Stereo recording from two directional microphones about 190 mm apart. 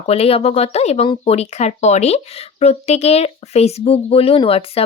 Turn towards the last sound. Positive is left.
turn(degrees=30)  # may be behind; listen again after turning